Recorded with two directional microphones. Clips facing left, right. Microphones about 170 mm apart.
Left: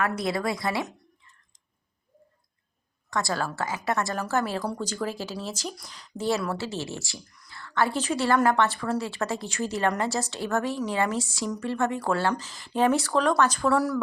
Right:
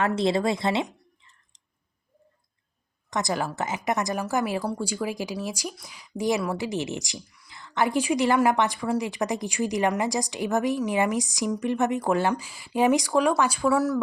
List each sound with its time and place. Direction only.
0.0 s speech: 25° right (ahead or behind)
3.1 s a woman's voice: 20° right (ahead or behind); by 14.0 s 5° right (ahead or behind)